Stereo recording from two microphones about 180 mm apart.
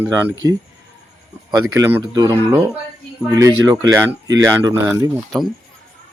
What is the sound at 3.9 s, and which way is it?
Speech, 15° right (ahead or behind).